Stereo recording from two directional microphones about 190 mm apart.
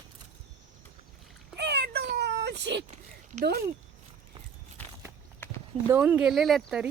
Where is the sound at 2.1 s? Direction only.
60° right (ahead or behind).